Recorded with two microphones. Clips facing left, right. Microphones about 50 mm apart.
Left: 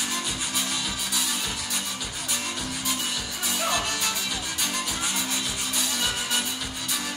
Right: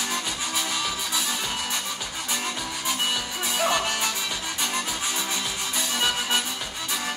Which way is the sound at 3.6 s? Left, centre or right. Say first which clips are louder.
Right 3 dB; right.